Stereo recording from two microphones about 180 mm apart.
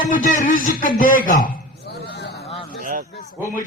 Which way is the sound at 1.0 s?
50° left (ahead or behind).